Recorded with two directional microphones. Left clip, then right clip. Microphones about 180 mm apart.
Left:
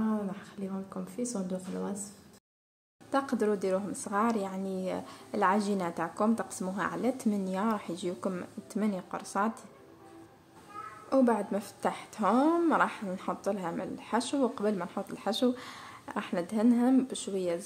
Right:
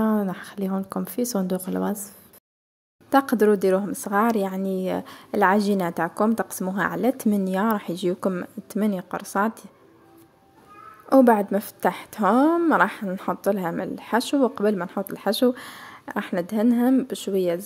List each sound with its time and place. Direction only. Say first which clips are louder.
0.0 s speech: right 10 dB; 55° right (ahead or behind); by 9.7 s 40° right (ahead or behind)
11.1 s a woman's voice: right 10 dB; 50° right (ahead or behind)